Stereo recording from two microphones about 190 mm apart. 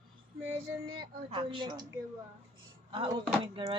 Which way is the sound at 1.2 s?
25° right (ahead or behind).